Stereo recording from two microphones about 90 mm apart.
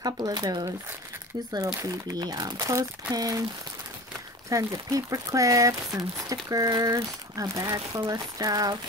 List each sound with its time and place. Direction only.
0.0 s speech: 50° right (ahead or behind)
2.5 s speech: 40° right (ahead or behind)
4.5 s speech: 40° right (ahead or behind)